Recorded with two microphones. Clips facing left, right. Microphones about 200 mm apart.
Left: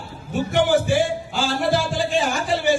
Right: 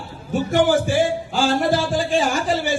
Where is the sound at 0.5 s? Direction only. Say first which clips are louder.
Right 1 dB; 45° right (ahead or behind).